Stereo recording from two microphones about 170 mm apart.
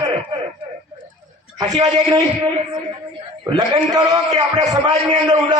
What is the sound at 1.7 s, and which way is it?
Speech, 25° right (ahead or behind).